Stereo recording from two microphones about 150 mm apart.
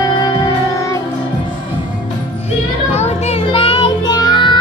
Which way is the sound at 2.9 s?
45° left (ahead or behind).